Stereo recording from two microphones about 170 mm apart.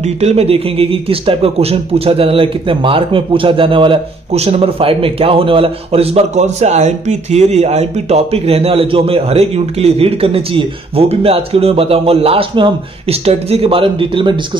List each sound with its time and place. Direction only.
0.0 s speech: 40° right (ahead or behind)